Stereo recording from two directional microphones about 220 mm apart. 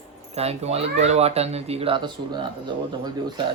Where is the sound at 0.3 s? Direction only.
30° right (ahead or behind).